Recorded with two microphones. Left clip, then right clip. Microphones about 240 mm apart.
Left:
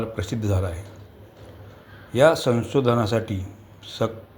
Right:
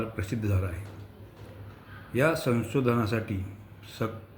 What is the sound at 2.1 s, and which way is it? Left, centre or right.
Speech, centre.